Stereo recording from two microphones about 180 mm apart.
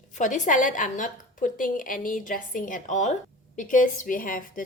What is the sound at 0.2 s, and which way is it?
A woman's voice, 45° left (ahead or behind).